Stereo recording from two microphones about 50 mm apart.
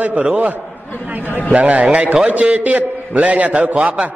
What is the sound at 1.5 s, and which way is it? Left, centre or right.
A man's voice, right.